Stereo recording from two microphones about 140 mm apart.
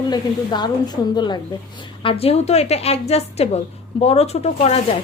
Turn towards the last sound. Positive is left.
turn(degrees=50)  # may be behind; listen again after turning